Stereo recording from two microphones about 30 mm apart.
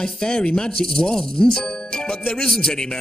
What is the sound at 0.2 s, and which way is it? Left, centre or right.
Speech, left.